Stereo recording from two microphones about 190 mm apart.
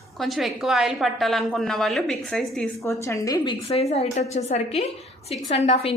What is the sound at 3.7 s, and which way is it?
A woman's voice, 35° left (ahead or behind).